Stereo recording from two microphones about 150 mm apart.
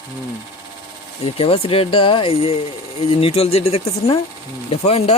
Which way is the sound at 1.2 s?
40° left (ahead or behind).